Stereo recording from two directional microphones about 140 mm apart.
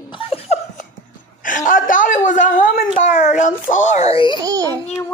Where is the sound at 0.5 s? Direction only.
50° left (ahead or behind).